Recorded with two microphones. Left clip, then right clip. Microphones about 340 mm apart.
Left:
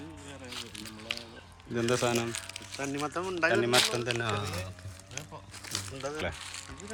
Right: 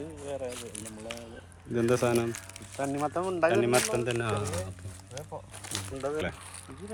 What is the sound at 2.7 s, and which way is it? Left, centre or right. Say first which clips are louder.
Speech: right 4 dB; centre.